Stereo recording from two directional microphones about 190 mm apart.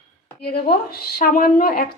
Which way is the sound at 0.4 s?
55° left (ahead or behind).